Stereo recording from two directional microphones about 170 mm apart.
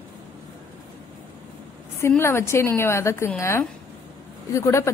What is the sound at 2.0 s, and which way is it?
A woman's voice, 15° left (ahead or behind).